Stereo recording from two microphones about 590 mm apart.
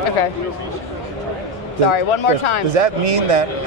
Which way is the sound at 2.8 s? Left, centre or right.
Right.